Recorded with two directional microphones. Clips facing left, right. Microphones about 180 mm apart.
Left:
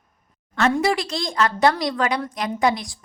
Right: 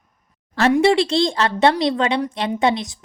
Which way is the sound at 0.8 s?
30° right (ahead or behind).